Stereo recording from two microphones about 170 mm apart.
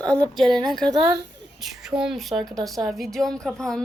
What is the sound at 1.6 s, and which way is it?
A woman's voice, centre (ahead or behind).